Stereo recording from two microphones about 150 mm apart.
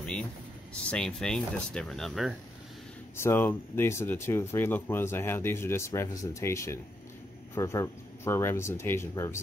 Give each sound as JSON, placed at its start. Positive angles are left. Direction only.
{"t": 0.0, "sound": "vehicle", "side_deg": 5}
{"t": 0.8, "sound": "speech", "side_deg": 5}
{"t": 3.2, "sound": "speech", "side_deg": 15}